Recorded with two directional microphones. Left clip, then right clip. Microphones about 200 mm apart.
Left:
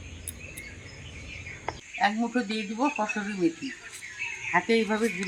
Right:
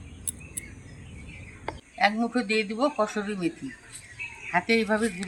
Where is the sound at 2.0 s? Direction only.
25° right (ahead or behind).